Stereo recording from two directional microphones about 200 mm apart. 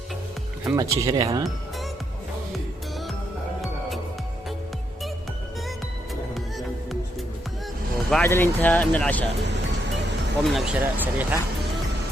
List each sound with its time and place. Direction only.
0.6 s speech: 15° right (ahead or behind)
3.6 s music: centre (ahead or behind)
8.1 s speech: 10° left (ahead or behind)
10.4 s speech: 5° right (ahead or behind)